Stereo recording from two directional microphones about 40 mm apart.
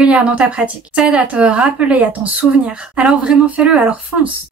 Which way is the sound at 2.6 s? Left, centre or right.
Right.